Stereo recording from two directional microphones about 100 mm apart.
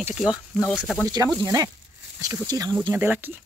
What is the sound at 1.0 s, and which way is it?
Speech, 35° right (ahead or behind).